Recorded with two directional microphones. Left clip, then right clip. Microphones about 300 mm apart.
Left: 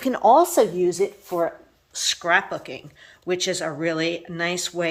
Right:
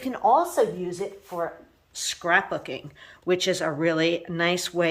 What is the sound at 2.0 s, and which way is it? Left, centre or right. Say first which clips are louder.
A woman's voice: left 2 dB; centre.